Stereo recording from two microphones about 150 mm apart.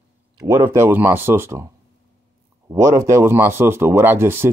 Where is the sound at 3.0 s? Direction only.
20° right (ahead or behind).